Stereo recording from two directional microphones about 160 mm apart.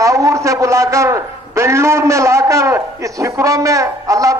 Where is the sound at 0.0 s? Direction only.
20° right (ahead or behind).